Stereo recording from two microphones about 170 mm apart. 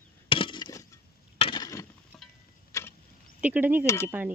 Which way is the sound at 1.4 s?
30° left (ahead or behind).